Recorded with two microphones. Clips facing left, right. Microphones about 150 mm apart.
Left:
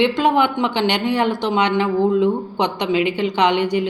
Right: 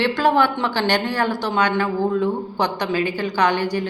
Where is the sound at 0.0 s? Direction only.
20° left (ahead or behind).